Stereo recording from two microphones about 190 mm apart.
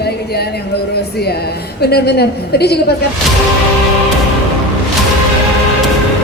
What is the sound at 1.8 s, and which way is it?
Speech, 60° left (ahead or behind).